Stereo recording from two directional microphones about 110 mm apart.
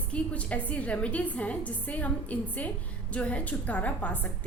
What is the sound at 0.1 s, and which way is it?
A woman's voice, 10° left (ahead or behind).